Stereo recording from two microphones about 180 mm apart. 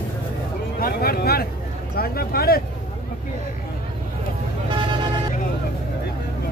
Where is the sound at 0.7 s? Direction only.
55° left (ahead or behind).